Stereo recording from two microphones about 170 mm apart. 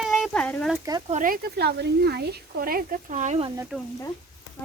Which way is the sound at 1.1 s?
55° right (ahead or behind).